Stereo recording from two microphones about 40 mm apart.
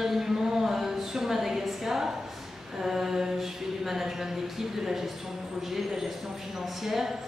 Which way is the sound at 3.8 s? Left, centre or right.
Centre.